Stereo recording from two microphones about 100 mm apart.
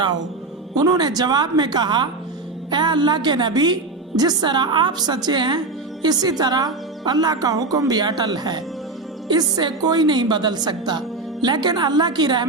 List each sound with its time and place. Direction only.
0.8 s a woman's voice: 40° right (ahead or behind)